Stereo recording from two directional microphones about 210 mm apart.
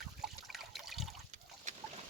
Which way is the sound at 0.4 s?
Centre (ahead or behind).